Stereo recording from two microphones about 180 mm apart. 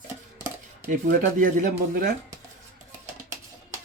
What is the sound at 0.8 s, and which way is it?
Speech, 45° right (ahead or behind).